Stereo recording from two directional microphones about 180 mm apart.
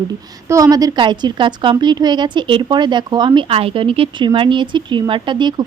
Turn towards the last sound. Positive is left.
turn(degrees=-25)  # may be behind; listen again after turning